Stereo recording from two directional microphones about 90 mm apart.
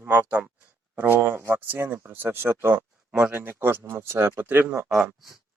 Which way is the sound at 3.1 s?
15° right (ahead or behind).